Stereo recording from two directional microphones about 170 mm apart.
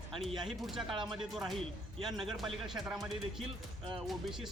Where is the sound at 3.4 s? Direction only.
30° right (ahead or behind).